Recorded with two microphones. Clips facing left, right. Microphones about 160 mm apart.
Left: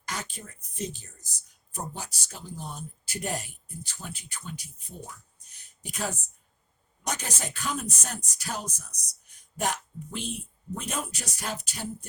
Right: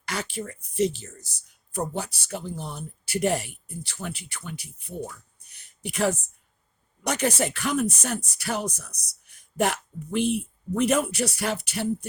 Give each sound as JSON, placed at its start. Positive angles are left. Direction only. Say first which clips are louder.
{"t": 0.0, "sound": "speech", "louder": "right 6 dB", "side_deg": -70}